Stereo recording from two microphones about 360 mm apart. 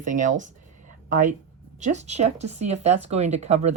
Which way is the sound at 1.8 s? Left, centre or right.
Centre.